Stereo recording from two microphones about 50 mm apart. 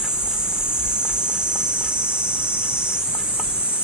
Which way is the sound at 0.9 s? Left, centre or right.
Centre.